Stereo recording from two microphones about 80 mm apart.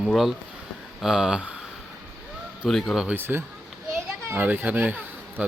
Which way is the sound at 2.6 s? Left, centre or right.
Centre.